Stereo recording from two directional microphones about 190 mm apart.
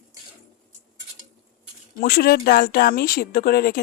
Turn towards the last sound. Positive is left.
turn(degrees=50)  # may be behind; listen again after turning